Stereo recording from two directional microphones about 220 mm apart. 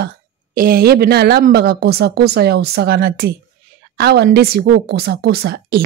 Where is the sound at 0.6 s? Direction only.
45° right (ahead or behind).